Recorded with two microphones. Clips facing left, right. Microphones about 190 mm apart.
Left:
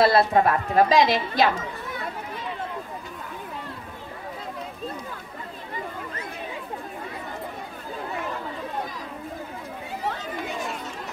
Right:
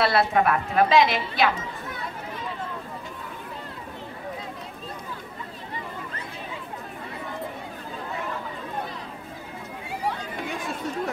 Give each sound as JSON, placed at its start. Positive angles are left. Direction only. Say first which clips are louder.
{"t": 0.0, "sound": "a woman's voice", "louder": "left 3 dB", "side_deg": 35}